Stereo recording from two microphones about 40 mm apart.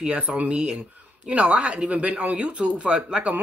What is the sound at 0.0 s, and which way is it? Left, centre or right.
Speech, right.